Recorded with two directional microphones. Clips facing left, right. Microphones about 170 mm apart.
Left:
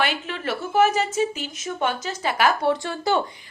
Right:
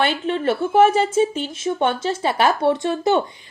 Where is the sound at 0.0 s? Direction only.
30° right (ahead or behind).